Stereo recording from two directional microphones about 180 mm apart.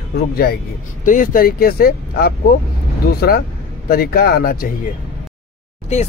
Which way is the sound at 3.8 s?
60° left (ahead or behind).